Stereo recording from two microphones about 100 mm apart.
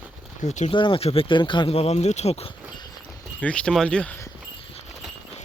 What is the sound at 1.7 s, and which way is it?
Speech, 85° left.